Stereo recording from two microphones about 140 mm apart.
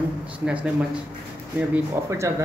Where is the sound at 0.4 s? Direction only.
10° right (ahead or behind).